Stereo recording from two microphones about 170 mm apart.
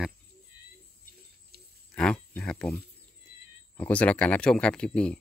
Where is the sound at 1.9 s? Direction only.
5° left (ahead or behind).